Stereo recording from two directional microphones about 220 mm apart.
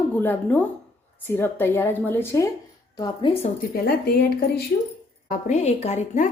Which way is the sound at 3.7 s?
45° left (ahead or behind).